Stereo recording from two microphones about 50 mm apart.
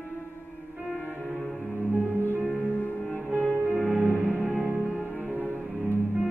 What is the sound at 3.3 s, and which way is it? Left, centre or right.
Music, right.